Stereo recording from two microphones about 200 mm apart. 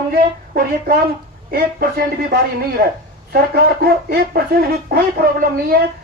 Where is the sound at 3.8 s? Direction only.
50° right (ahead or behind).